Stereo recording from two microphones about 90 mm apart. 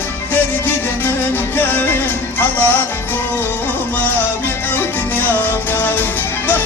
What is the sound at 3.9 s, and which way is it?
Music, 25° left (ahead or behind).